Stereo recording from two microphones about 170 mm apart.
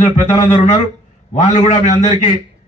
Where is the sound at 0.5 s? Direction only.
45° left (ahead or behind).